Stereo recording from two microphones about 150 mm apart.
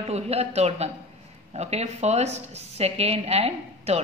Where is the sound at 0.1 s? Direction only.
45° right (ahead or behind).